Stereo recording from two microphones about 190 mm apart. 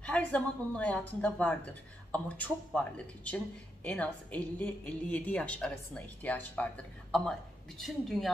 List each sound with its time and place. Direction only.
0.0 s a woman's voice: 5° left (ahead or behind)